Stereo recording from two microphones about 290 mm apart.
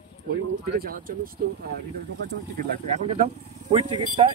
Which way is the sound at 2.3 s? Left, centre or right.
Right.